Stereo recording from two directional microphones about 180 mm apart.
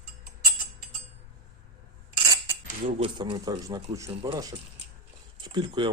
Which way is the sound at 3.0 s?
30° right (ahead or behind).